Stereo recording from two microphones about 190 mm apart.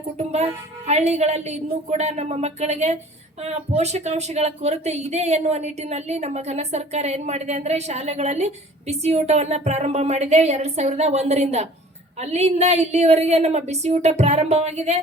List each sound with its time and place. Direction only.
0.2 s speech: 35° right (ahead or behind)